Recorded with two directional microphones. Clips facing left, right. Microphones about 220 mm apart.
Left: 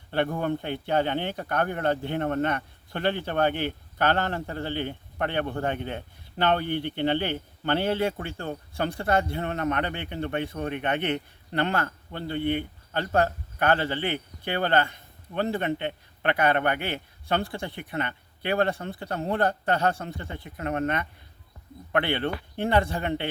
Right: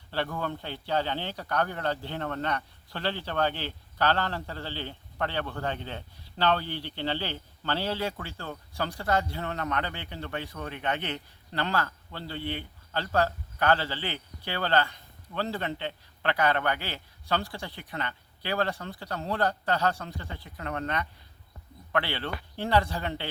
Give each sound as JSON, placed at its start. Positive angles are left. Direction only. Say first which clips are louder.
{"t": 0.1, "sound": "a man's voice", "louder": "left 6 dB", "side_deg": 20}